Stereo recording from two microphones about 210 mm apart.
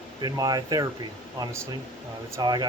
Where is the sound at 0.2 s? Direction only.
20° right (ahead or behind).